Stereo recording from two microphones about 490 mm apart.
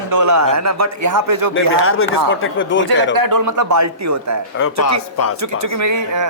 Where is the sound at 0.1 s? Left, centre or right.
Right.